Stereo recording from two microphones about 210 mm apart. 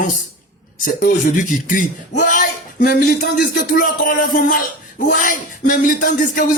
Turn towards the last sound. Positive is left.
turn(degrees=40)  # may be behind; listen again after turning